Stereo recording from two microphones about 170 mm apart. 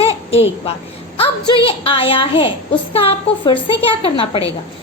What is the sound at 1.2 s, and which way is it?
A woman's voice, 30° left (ahead or behind).